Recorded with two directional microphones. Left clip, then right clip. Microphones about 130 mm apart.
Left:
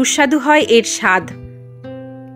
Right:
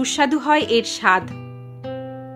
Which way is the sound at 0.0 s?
30° left (ahead or behind).